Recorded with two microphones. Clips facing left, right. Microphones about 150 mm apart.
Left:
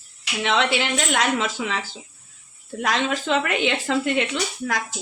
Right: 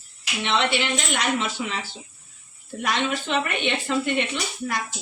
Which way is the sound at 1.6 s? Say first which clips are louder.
Left 2 dB; 90° left.